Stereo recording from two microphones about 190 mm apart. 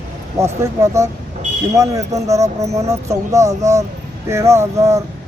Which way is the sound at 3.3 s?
15° right (ahead or behind).